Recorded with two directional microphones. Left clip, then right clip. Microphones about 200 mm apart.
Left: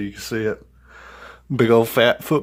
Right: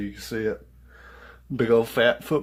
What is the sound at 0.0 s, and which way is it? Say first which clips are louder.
Speech: left 4 dB; 45° left (ahead or behind).